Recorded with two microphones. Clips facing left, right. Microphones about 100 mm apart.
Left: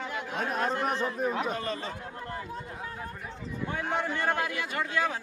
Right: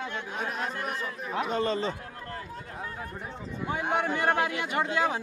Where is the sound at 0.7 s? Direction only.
30° left (ahead or behind).